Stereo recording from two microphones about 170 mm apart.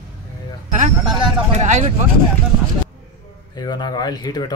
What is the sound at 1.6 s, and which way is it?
Speech, 45° right (ahead or behind).